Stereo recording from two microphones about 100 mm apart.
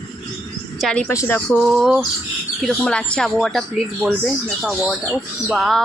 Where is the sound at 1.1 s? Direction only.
30° left (ahead or behind).